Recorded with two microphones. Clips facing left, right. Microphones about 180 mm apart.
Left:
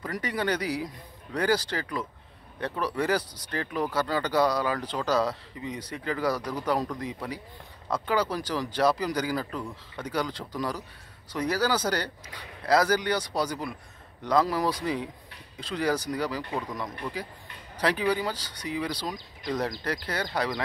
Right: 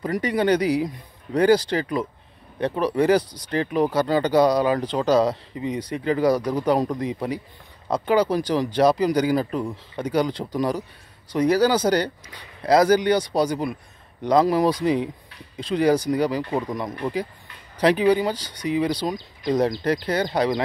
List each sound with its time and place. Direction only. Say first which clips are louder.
0.0 s speech: right 8 dB; 20° right (ahead or behind)
17.7 s speech: right 8 dB; 20° right (ahead or behind)